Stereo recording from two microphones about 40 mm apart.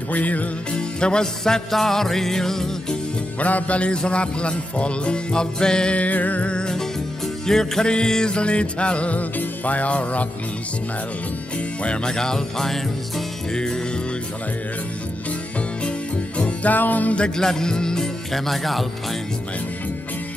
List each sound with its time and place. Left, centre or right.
0.1 s music: left
0.7 s music: left
3.3 s music: left; by 5.9 s centre
5.9 s music: left
6.4 s music: left
7.4 s music: centre; by 10.2 s left
11.8 s music: left
13.5 s music: centre
16.6 s music: left
17.4 s speech: centre
18.3 s speech: centre